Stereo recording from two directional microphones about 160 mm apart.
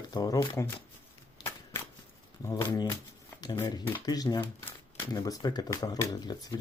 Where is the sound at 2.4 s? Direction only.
20° left (ahead or behind).